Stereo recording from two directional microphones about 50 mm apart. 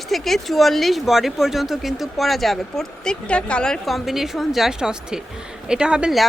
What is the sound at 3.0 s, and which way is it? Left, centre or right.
Speech, centre.